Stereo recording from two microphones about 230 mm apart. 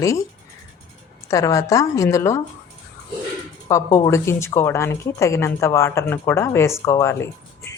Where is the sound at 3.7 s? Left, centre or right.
Centre.